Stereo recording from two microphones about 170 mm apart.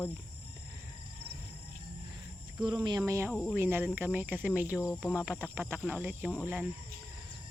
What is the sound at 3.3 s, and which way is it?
Speech, centre (ahead or behind).